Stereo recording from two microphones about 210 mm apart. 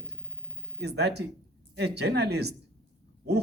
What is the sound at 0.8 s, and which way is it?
Speech, 50° right (ahead or behind).